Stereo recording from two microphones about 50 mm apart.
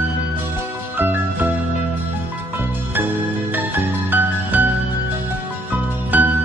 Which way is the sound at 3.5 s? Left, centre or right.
Right.